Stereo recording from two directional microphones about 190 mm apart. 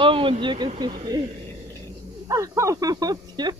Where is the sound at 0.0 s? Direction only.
30° right (ahead or behind).